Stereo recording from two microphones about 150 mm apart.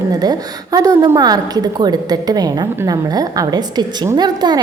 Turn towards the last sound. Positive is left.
turn(degrees=-30)  # may be behind; listen again after turning